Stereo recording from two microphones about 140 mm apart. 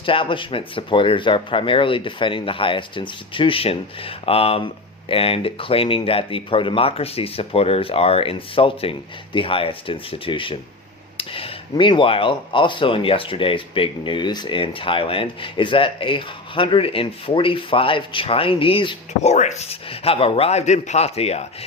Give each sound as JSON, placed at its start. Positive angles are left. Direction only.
{"t": 0.0, "sound": "speech", "side_deg": 40}
{"t": 19.2, "sound": "speech", "side_deg": 55}